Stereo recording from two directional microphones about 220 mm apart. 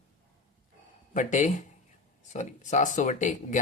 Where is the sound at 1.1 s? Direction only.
35° left (ahead or behind).